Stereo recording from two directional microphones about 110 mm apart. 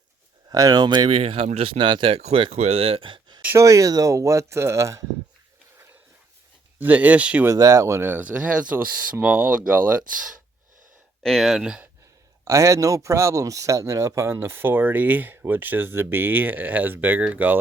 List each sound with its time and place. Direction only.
0.5 s speech: 35° right (ahead or behind)
1.1 s speech: 60° right (ahead or behind)
3.6 s speech: 30° right (ahead or behind)
6.7 s speech: 15° right (ahead or behind)
7.4 s speech: 30° right (ahead or behind); by 10.0 s 15° right (ahead or behind)
11.2 s speech: centre (ahead or behind)
12.5 s speech: 30° right (ahead or behind)